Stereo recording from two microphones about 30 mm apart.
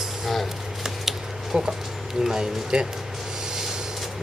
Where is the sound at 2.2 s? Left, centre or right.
Right.